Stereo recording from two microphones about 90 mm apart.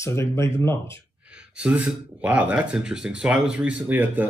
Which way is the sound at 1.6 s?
15° right (ahead or behind).